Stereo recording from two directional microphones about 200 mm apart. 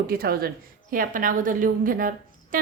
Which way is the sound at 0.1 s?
50° right (ahead or behind).